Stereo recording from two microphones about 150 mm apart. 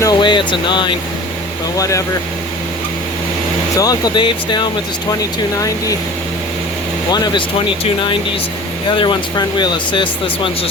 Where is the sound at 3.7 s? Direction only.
25° left (ahead or behind).